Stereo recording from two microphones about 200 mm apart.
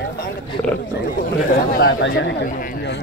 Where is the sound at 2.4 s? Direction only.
45° left (ahead or behind).